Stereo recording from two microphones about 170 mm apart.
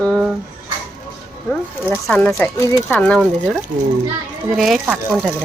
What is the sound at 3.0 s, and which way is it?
Speech, 5° left (ahead or behind).